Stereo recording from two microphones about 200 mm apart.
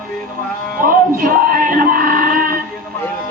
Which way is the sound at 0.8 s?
45° right (ahead or behind).